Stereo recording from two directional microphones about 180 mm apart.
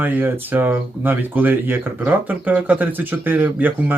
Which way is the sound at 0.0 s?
10° right (ahead or behind).